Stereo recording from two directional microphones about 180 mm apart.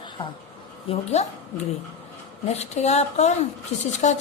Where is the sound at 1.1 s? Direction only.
40° left (ahead or behind).